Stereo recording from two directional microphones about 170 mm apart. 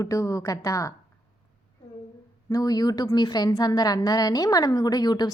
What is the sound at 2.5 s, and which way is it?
A woman's voice, 20° left (ahead or behind).